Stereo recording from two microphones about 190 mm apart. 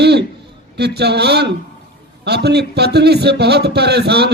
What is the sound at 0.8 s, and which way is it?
Speech, 60° right (ahead or behind).